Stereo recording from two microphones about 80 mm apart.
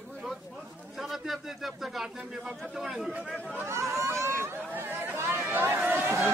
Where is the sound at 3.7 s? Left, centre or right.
Right.